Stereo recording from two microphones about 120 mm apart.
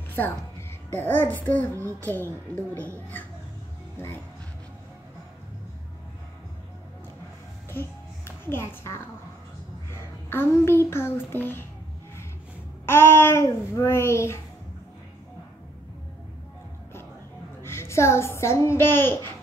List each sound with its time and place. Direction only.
0.1 s a child's voice: 20° left (ahead or behind)
3.9 s speech: 20° left (ahead or behind)
8.5 s a child's voice: 20° left (ahead or behind)
12.8 s a child's voice: 20° left (ahead or behind)
17.6 s a child's voice: 20° left (ahead or behind)